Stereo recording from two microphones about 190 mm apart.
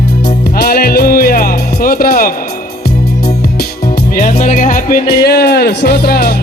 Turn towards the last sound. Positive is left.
turn(degrees=55)  # may be behind; listen again after turning